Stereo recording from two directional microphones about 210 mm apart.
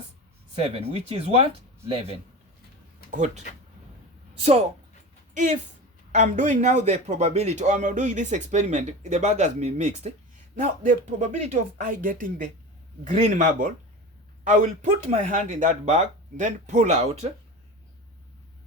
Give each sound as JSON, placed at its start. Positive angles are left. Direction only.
{"t": 0.5, "sound": "a man's voice", "side_deg": -30}
{"t": 4.4, "sound": "a man's voice", "side_deg": -30}